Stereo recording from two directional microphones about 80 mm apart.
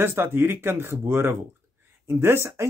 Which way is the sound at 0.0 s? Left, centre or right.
Right.